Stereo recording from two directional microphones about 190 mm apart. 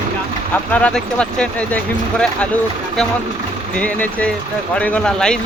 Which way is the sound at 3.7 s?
5° left (ahead or behind).